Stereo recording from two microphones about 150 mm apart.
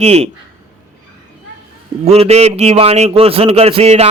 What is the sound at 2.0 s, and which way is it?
A man's voice, 40° right (ahead or behind).